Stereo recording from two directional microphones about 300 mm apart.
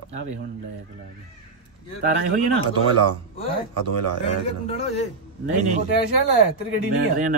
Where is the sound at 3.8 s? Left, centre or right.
Right.